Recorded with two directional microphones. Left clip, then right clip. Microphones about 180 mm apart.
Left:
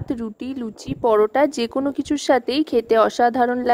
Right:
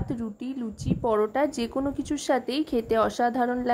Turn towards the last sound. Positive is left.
turn(degrees=45)  # may be behind; listen again after turning